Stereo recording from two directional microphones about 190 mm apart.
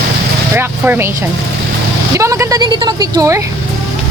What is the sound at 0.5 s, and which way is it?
Vehicle, 10° right (ahead or behind).